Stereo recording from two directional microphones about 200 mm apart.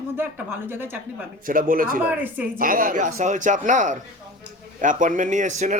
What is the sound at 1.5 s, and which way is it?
Speech, 45° right (ahead or behind).